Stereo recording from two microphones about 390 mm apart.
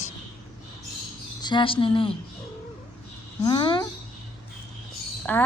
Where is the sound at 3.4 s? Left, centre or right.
Centre.